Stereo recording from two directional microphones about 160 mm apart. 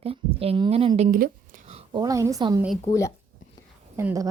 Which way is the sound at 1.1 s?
60° right (ahead or behind).